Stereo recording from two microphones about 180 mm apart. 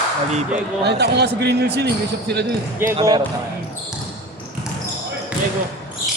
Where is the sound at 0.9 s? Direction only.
65° right (ahead or behind).